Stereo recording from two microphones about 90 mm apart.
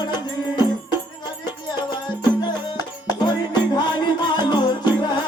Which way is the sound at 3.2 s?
55° left (ahead or behind).